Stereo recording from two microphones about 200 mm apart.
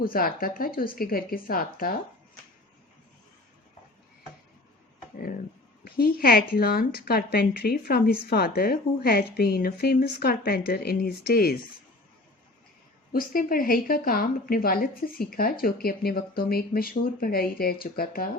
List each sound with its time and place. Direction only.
0.0 s a woman's voice: 45° left (ahead or behind)
5.1 s a woman's voice: 45° left (ahead or behind)
13.1 s a woman's voice: 45° left (ahead or behind)